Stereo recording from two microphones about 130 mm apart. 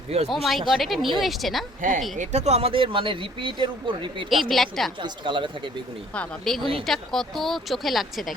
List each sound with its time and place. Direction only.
0.3 s speech: centre (ahead or behind)
1.8 s speech: 90° right
2.1 s speech: 60° right (ahead or behind); by 4.3 s 40° right (ahead or behind)
4.3 s speech: centre (ahead or behind)
4.9 s speech: 40° right (ahead or behind)
6.1 s speech: 5° left (ahead or behind)